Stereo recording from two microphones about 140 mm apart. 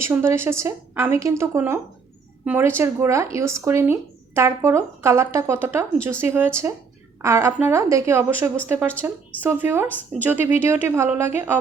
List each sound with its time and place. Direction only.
0.0 s a woman's voice: 20° right (ahead or behind)